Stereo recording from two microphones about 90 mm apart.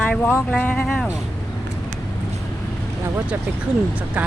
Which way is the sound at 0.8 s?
5° left (ahead or behind).